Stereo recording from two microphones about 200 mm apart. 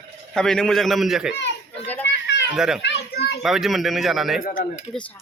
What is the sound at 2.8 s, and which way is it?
Children playing, 55° left (ahead or behind).